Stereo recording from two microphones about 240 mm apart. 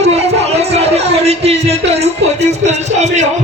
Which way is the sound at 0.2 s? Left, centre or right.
Right.